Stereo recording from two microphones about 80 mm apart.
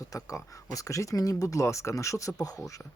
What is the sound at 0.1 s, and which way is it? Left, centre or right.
Speech, left.